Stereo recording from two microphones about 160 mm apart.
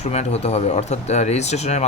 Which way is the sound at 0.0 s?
40° left (ahead or behind).